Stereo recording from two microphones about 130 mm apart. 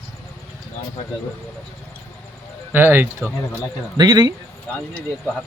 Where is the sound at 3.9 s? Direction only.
30° right (ahead or behind).